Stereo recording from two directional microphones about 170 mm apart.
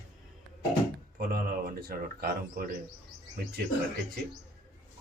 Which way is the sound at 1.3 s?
60° right (ahead or behind).